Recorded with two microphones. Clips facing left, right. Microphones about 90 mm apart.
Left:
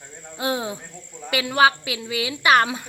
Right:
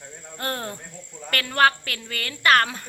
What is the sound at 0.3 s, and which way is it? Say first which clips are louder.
A woman's voice: left 5 dB; 5° left (ahead or behind).